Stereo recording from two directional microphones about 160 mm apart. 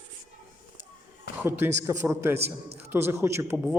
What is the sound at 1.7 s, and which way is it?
Speech, 15° right (ahead or behind).